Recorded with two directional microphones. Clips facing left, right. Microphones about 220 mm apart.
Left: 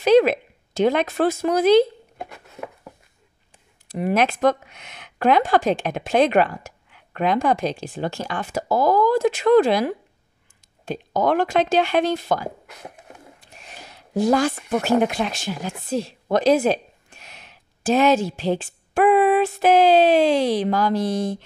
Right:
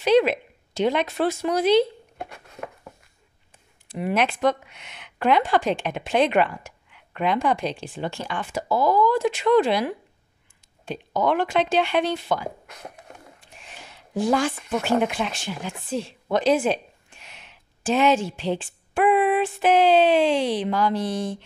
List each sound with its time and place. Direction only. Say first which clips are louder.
0.0 s speech: left 3 dB; 45° left (ahead or behind)
2.1 s a sound: left 2 dB; 5° left (ahead or behind)
3.9 s speech: left 3 dB; 40° left (ahead or behind)